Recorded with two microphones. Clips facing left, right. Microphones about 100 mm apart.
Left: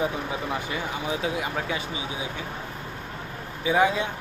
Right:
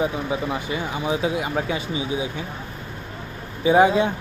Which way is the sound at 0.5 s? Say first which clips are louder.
Right 3 dB; 15° right (ahead or behind).